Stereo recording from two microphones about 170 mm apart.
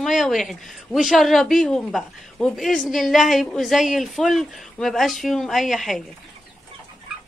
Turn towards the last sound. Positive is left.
turn(degrees=0)  # may be behind; listen again after turning